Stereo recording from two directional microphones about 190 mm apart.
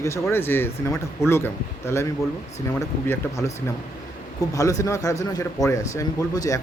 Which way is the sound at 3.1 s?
15° left (ahead or behind).